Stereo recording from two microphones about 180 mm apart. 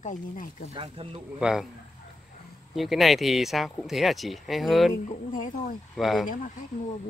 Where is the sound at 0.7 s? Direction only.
30° right (ahead or behind).